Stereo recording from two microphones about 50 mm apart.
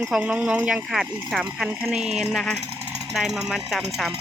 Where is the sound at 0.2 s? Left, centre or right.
Right; by 4.1 s centre.